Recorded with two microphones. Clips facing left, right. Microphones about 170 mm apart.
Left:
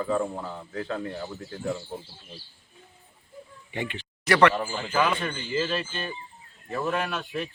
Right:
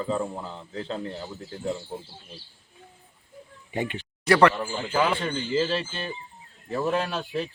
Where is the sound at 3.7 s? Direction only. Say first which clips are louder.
Right 3 dB; 40° right (ahead or behind).